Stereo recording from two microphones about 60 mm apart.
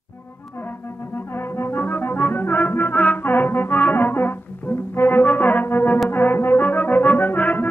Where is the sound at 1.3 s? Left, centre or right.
Left.